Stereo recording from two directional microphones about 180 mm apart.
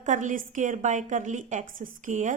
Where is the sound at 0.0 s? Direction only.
45° right (ahead or behind).